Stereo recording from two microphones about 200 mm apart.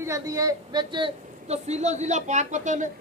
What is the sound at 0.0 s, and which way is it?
A woman's voice, 15° right (ahead or behind).